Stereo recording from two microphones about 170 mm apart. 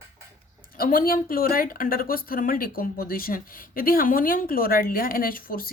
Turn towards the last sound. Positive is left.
turn(degrees=60)  # may be behind; listen again after turning